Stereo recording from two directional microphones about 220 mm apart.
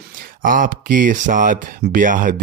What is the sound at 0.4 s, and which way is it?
Speech, 35° right (ahead or behind).